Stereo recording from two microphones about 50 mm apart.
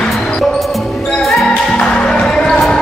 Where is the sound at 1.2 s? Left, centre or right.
Centre.